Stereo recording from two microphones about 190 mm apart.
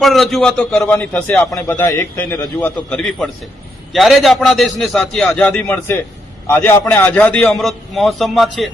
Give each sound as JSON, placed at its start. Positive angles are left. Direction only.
{"t": 0.0, "sound": "a man's voice", "side_deg": 0}